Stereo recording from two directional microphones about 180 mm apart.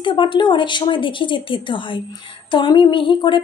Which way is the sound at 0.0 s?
25° left (ahead or behind).